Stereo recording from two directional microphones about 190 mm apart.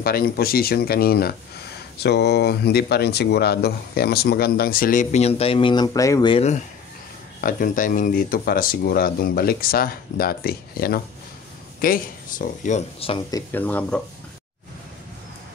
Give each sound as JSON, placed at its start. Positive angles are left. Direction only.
{"t": 0.0, "sound": "speech", "side_deg": 50}
{"t": 6.3, "sound": "speech", "side_deg": 35}
{"t": 13.3, "sound": "speech", "side_deg": 10}